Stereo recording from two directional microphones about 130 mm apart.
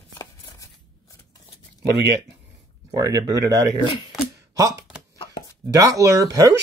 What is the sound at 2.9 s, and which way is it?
Speech, 30° right (ahead or behind).